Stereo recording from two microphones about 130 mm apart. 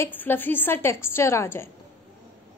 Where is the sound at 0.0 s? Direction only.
15° left (ahead or behind).